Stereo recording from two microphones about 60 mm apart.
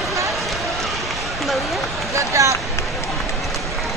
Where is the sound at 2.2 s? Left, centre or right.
Right.